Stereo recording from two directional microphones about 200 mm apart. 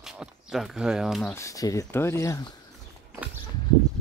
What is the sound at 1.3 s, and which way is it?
Speech, 15° left (ahead or behind).